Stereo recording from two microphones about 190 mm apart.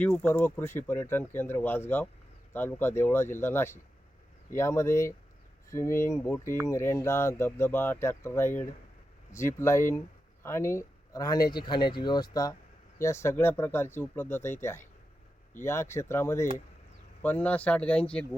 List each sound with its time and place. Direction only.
0.0 s speech: 10° left (ahead or behind)